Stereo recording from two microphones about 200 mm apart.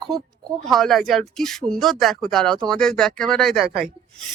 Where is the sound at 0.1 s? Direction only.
Centre (ahead or behind).